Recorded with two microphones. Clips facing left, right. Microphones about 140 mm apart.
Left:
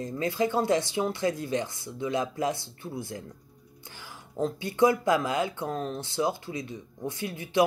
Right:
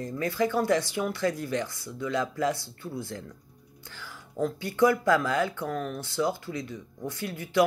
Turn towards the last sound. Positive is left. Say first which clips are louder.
# even
turn(degrees=20)  # may be behind; listen again after turning